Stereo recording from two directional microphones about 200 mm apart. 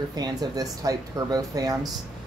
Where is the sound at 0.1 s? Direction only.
20° right (ahead or behind).